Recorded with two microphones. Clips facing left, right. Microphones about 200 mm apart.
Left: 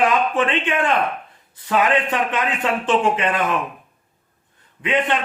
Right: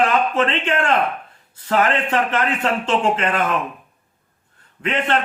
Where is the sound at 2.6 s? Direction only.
15° left (ahead or behind).